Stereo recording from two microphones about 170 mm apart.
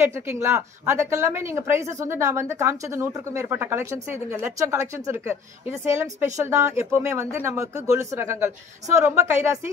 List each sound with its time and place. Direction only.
0.0 s speech: 15° right (ahead or behind)